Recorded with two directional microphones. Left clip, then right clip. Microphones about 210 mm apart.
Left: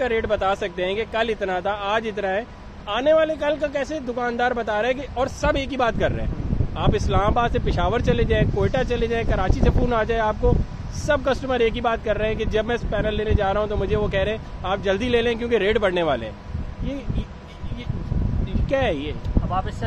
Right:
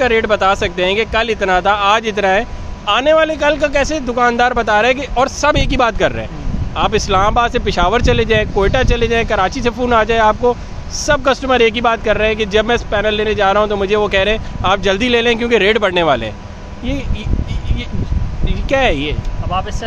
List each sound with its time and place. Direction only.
0.0 s speech: 5° right (ahead or behind)
18.5 s speech: 5° right (ahead or behind)